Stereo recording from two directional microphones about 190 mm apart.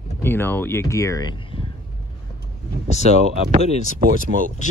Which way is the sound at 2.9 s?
35° left (ahead or behind).